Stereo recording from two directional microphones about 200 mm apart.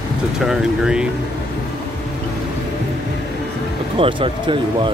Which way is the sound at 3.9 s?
25° right (ahead or behind).